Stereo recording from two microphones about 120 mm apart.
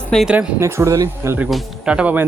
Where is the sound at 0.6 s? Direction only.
25° right (ahead or behind).